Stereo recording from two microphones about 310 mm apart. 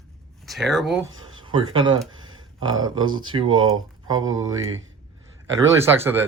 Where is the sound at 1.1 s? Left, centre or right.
Centre.